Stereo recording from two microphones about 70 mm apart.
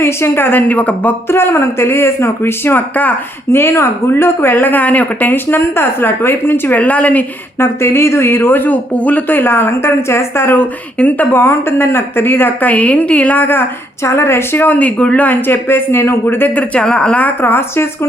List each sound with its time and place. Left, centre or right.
0.0 s speech: left
1.3 s a woman's voice: left
7.6 s a woman's voice: left
11.3 s a woman's voice: left
16.7 s speech: centre; by 17.8 s left